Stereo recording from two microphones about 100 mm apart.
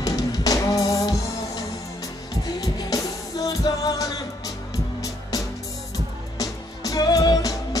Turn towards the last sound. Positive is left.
turn(degrees=40)  # may be behind; listen again after turning